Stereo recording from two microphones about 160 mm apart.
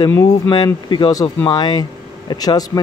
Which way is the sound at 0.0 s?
20° left (ahead or behind).